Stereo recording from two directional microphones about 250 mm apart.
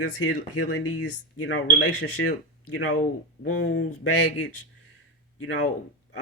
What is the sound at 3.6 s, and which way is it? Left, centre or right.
Speech, left.